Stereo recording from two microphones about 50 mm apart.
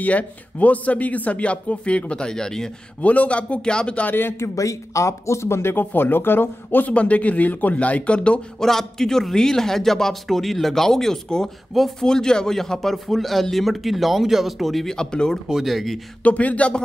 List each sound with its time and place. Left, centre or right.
0.0 s speech: left; by 2.7 s centre
3.0 s speech: left
4.1 s speech: left
4.6 s speech: left
6.9 s speech: left
8.5 s a man's voice: centre
15.0 s speech: centre
15.6 s a man's voice: centre
16.2 s speech: left